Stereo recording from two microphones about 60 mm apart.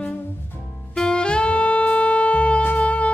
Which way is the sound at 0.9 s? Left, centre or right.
Centre.